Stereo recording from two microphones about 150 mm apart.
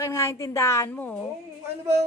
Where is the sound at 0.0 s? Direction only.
20° left (ahead or behind).